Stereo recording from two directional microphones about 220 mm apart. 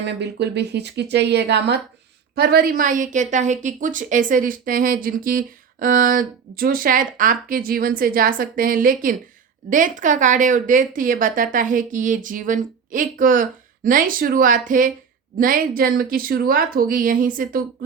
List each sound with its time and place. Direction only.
0.0 s a woman's voice: 50° right (ahead or behind)